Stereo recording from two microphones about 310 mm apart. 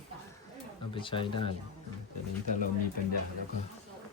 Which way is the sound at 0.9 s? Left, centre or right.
Centre.